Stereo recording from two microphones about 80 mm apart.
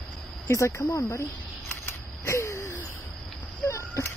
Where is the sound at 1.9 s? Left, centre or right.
Left.